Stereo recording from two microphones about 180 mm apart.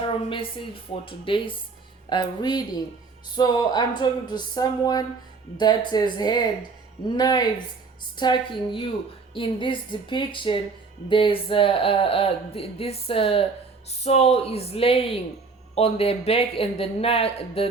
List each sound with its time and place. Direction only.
1.0 s a woman's voice: 30° left (ahead or behind)